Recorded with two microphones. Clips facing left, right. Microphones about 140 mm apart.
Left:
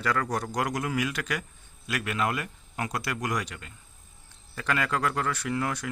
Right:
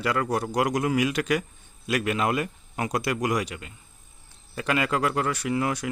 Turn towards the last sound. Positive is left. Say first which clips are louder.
# right 4 dB
turn(degrees=-15)  # may be behind; listen again after turning